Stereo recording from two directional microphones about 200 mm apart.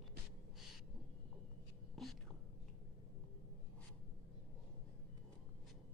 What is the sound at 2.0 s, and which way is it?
Whispering, centre (ahead or behind).